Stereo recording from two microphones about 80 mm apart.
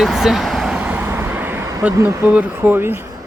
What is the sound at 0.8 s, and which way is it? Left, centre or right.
Vehicle, right.